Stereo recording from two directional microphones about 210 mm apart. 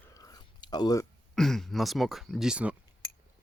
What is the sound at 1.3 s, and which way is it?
Speech, centre (ahead or behind).